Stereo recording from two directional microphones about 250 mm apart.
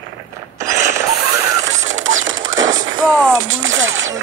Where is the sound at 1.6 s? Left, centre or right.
Right.